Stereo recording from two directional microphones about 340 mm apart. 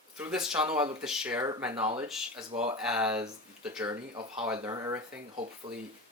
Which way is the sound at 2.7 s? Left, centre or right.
Centre.